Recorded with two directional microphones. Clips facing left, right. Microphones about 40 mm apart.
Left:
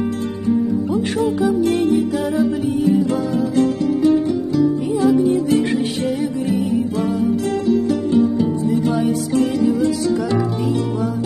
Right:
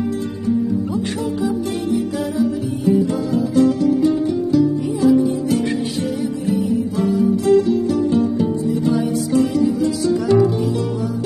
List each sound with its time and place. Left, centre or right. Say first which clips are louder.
0.9 s music: left 3 dB; left
5.0 s music: even; left
6.6 s music: even; left
9.5 s music: left 1 dB; left